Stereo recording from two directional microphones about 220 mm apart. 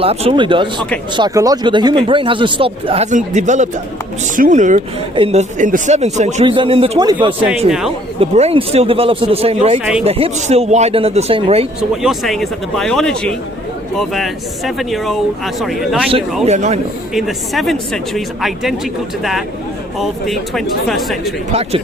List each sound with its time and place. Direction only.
0.0 s speech: 25° right (ahead or behind)
7.7 s speech: centre (ahead or behind)
8.2 s speech: 25° right (ahead or behind)
11.8 s speech: centre (ahead or behind)
16.5 s a man's voice: 30° right (ahead or behind)
17.2 s speech: centre (ahead or behind)
20.0 s speech: centre (ahead or behind)
21.5 s speech: 25° right (ahead or behind)